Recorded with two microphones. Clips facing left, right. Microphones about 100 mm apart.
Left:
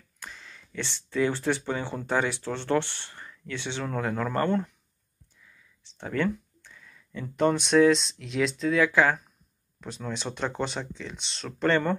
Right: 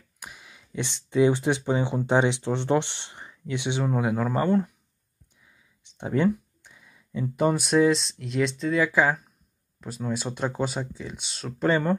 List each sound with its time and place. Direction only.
0.2 s speech: 15° right (ahead or behind)
5.4 s a sound: 20° right (ahead or behind)
7.2 s speech: 5° right (ahead or behind)